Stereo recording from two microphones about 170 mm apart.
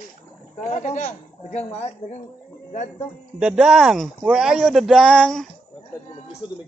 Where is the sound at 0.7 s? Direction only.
45° left (ahead or behind).